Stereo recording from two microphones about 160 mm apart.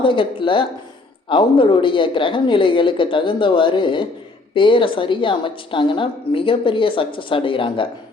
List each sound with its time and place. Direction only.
0.0 s a woman's voice: 30° left (ahead or behind)